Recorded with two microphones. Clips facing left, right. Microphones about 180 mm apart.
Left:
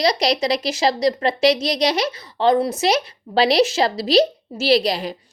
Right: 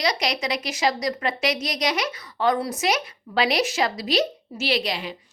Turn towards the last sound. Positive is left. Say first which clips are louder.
# left 8 dB
turn(degrees=40)  # may be behind; listen again after turning